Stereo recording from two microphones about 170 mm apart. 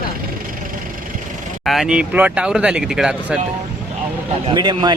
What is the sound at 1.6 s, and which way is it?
Speech, centre (ahead or behind).